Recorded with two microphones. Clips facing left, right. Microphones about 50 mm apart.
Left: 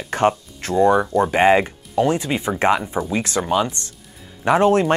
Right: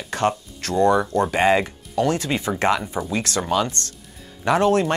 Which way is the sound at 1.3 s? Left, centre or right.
Left.